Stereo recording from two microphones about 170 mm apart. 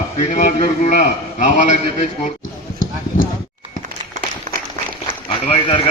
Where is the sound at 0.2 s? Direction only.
45° left (ahead or behind).